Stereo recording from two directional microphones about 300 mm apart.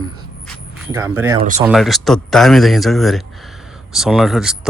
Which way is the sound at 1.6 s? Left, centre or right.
Centre.